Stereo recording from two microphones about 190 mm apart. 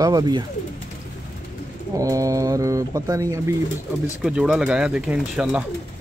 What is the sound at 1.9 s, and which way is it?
Speech, 15° right (ahead or behind).